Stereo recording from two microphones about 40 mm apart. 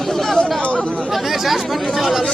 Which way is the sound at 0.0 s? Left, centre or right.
Centre.